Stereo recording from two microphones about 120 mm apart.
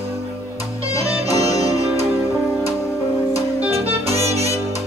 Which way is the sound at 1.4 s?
30° left (ahead or behind).